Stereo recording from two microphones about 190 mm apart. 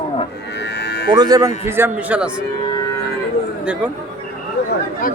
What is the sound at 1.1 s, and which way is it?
A man's voice, 20° right (ahead or behind).